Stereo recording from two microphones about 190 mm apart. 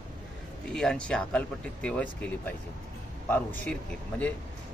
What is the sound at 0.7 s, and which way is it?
A man's voice, 5° left (ahead or behind).